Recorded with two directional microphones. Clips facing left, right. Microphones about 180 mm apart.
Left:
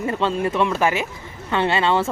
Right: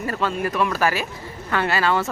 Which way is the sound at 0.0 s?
25° left (ahead or behind).